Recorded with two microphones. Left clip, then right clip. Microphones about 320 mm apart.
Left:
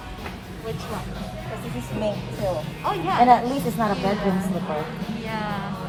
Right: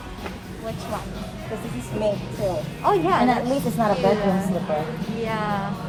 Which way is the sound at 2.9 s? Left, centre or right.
Centre.